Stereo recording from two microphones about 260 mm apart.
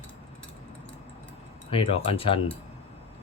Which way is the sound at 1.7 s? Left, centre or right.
Left.